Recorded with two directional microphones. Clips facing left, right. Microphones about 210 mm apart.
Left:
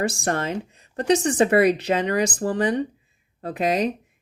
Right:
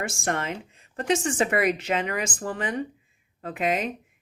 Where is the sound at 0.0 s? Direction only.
35° left (ahead or behind).